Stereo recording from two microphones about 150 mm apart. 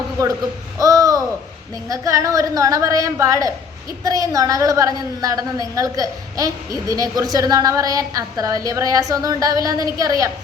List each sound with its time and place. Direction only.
0.8 s babbling: 25° right (ahead or behind)
1.9 s a woman's voice: 20° right (ahead or behind)